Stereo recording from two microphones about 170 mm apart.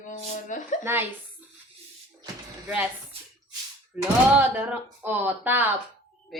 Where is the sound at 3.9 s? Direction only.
10° right (ahead or behind).